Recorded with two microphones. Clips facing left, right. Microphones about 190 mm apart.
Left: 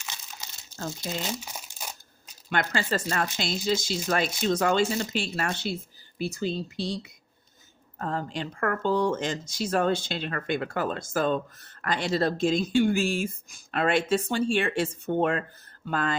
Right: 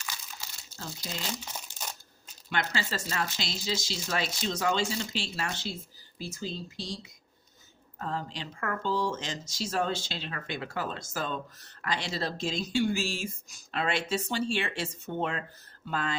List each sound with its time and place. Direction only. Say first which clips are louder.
0.0 s crumpling: left 1 dB; 20° left (ahead or behind)
1.3 s crumpling: left 3 dB; 10° left (ahead or behind)
2.5 s speech: left 5 dB; 55° left (ahead or behind)
7.9 s speech: left 4 dB; 50° left (ahead or behind)